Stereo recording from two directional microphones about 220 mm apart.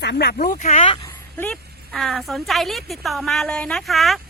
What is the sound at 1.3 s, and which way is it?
A woman's voice, 5° left (ahead or behind).